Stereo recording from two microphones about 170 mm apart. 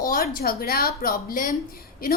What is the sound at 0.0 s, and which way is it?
A woman's voice, 60° left (ahead or behind).